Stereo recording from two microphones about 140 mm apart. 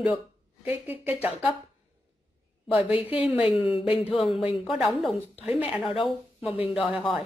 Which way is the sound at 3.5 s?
40° left (ahead or behind).